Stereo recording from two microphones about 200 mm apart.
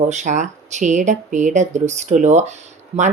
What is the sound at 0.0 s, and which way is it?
Speech, 35° right (ahead or behind).